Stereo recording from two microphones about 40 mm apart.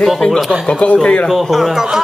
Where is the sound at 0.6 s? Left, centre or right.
Left.